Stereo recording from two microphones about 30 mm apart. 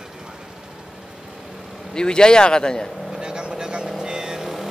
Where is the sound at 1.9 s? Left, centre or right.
Left.